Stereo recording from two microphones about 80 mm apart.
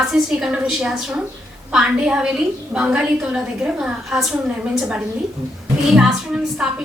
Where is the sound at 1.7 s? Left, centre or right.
Centre.